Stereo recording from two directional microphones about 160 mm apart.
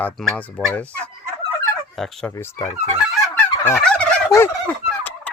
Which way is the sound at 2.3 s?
20° left (ahead or behind).